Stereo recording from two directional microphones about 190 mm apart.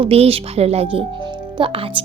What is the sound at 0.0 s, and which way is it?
A woman's voice, 30° right (ahead or behind).